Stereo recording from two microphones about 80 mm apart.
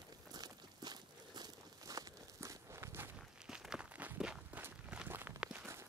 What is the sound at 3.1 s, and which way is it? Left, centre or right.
Walk, centre.